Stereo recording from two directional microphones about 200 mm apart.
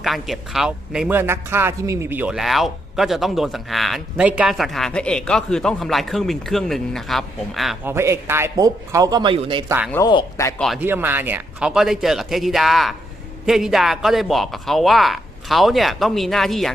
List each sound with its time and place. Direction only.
0.0 s speech: centre (ahead or behind)
7.9 s a man's voice: 15° right (ahead or behind)
9.9 s speech: 20° left (ahead or behind)
10.6 s speech: centre (ahead or behind)